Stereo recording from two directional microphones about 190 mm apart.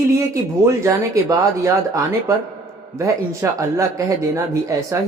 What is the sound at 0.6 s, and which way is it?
Speech, 15° right (ahead or behind).